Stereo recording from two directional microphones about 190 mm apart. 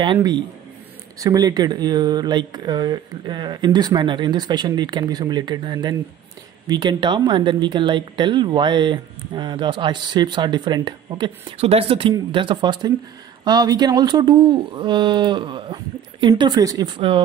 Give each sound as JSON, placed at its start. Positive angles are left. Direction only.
{"t": 0.0, "sound": "speech", "side_deg": -25}